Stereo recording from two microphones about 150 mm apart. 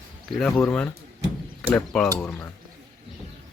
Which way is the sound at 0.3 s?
5° left (ahead or behind).